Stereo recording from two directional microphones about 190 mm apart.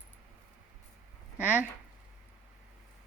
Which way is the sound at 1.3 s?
5° right (ahead or behind).